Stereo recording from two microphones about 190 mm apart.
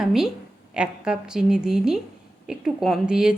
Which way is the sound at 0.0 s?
Centre (ahead or behind).